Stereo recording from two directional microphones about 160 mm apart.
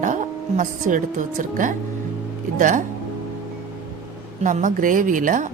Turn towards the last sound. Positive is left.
turn(degrees=-55)  # may be behind; listen again after turning